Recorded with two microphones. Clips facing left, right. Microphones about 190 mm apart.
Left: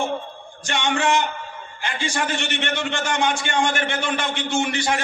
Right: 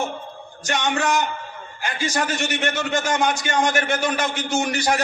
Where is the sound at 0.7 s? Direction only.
40° right (ahead or behind).